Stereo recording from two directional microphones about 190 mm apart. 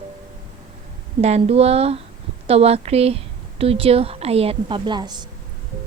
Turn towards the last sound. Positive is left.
turn(degrees=-20)  # may be behind; listen again after turning